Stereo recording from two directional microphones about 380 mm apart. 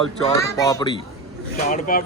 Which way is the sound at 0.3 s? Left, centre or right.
Centre.